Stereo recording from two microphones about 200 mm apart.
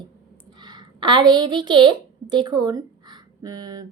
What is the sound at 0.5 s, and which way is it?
A woman's voice, 20° right (ahead or behind).